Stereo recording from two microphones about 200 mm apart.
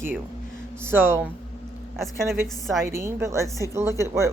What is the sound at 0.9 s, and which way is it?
A woman's voice, 10° right (ahead or behind).